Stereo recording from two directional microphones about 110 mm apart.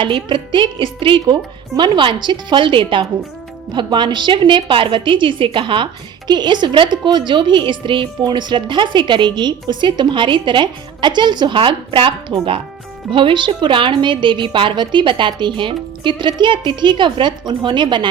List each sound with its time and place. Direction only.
0.0 s a woman's voice: 50° right (ahead or behind)